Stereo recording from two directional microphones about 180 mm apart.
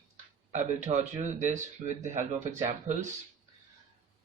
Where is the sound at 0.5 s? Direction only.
40° right (ahead or behind).